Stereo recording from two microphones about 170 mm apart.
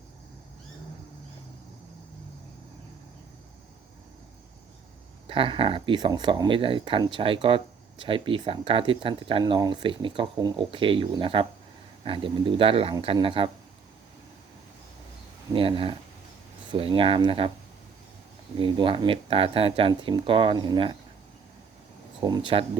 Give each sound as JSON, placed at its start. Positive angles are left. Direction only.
{"t": 5.3, "sound": "speech", "side_deg": -30}
{"t": 15.5, "sound": "speech", "side_deg": -30}
{"t": 18.5, "sound": "speech", "side_deg": -30}
{"t": 22.2, "sound": "speech", "side_deg": -25}